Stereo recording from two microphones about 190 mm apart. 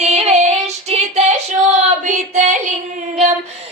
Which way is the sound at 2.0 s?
40° right (ahead or behind).